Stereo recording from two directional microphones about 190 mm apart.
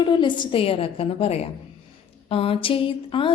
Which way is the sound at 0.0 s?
25° left (ahead or behind).